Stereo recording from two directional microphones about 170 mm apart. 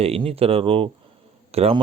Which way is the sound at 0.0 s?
35° right (ahead or behind).